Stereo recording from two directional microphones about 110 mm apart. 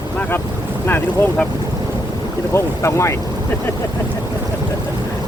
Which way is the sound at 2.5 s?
25° left (ahead or behind).